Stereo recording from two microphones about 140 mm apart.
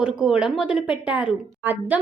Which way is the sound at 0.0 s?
5° right (ahead or behind).